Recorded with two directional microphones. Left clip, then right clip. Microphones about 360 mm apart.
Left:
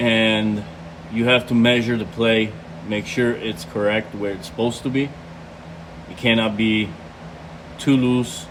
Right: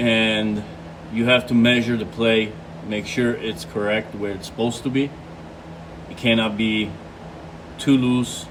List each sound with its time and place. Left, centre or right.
0.0 s a sound: centre
1.1 s speech: centre
6.2 s speech: centre
7.9 s speech: centre